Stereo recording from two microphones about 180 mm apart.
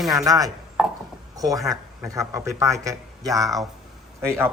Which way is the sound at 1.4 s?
20° right (ahead or behind).